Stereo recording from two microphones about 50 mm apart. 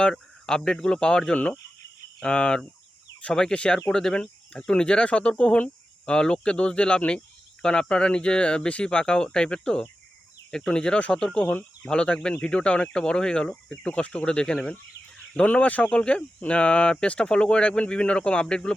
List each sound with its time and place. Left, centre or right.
0.0 s speech: centre
11.4 s speech: left
11.9 s speech: centre
15.4 s speech: left